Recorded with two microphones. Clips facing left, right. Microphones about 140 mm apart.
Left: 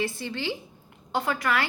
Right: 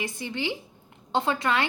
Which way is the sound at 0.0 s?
15° right (ahead or behind).